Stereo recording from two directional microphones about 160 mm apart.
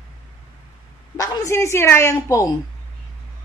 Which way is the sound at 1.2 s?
25° left (ahead or behind).